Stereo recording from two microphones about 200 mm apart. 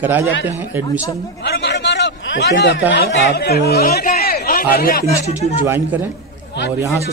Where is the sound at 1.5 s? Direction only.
55° left (ahead or behind).